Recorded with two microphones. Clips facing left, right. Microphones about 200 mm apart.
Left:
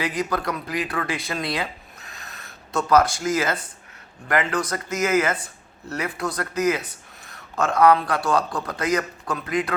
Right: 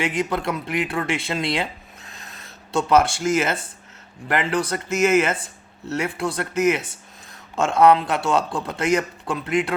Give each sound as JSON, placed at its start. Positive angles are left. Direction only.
{"t": 0.0, "sound": "a man's voice", "side_deg": -25}